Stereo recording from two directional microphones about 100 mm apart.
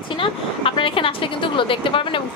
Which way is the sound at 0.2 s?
60° left (ahead or behind).